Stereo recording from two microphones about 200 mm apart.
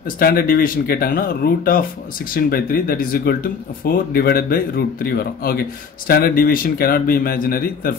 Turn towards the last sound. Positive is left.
turn(degrees=45)  # may be behind; listen again after turning